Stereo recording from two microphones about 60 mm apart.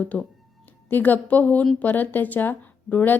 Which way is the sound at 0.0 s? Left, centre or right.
Left.